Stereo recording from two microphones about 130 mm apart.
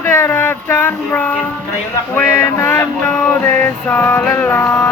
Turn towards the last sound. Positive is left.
turn(degrees=25)  # may be behind; listen again after turning